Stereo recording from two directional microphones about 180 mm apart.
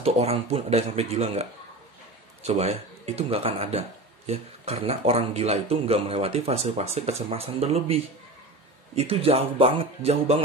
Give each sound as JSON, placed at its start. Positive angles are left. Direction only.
{"t": 0.0, "sound": "speech", "side_deg": -35}